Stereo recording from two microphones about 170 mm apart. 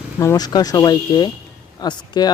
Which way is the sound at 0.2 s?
20° left (ahead or behind).